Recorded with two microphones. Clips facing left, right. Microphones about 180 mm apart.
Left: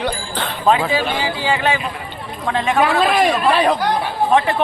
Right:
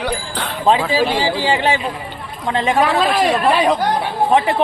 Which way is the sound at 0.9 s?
35° right (ahead or behind).